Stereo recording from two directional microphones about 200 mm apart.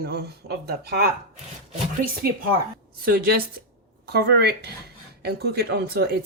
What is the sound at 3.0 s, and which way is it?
Speech, 45° right (ahead or behind).